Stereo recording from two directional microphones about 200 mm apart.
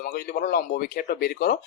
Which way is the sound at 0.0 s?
45° left (ahead or behind).